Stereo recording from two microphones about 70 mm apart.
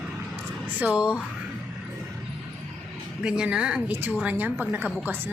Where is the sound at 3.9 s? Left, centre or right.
Right.